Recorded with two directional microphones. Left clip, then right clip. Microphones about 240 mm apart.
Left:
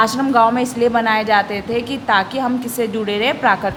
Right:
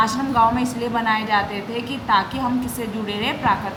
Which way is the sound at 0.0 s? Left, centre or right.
Left.